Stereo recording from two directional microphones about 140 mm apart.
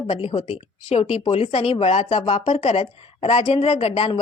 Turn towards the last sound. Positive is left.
turn(degrees=45)  # may be behind; listen again after turning